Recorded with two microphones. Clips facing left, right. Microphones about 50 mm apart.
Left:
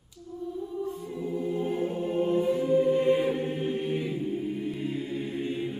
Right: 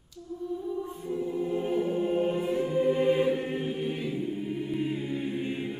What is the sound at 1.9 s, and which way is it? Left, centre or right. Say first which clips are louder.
Music: right 2 dB; centre.